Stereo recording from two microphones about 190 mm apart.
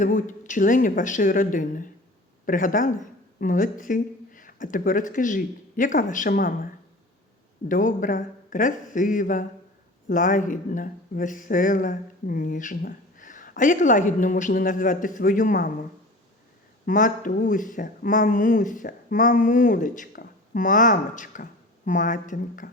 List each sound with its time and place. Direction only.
0.0 s a woman's voice: 40° left (ahead or behind)
7.7 s speech: 45° left (ahead or behind)
16.8 s speech: 45° left (ahead or behind)